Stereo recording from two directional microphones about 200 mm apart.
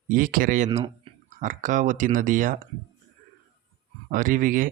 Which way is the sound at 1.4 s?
40° right (ahead or behind).